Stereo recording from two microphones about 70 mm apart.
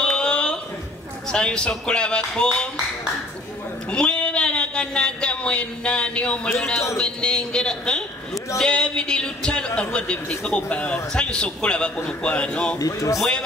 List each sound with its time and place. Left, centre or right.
0.0 s a sound: centre
1.3 s a man's voice: centre
3.9 s a man's voice: centre
12.7 s a man's voice: left